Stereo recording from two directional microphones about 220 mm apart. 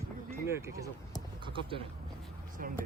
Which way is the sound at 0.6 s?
15° right (ahead or behind).